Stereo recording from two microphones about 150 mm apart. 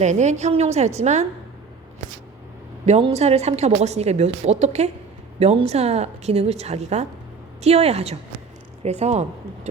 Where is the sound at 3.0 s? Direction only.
45° right (ahead or behind).